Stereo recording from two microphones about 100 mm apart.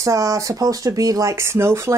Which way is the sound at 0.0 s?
35° right (ahead or behind).